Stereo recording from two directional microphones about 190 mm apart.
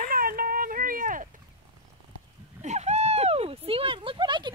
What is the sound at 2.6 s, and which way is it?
Speech, 35° right (ahead or behind).